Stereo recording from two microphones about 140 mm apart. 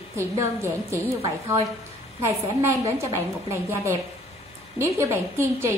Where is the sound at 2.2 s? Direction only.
20° right (ahead or behind).